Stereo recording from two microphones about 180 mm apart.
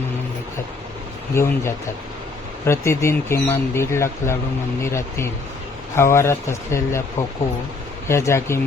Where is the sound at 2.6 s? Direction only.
15° left (ahead or behind).